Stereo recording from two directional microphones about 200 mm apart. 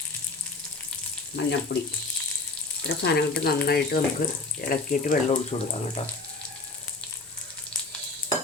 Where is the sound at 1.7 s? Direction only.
55° left (ahead or behind).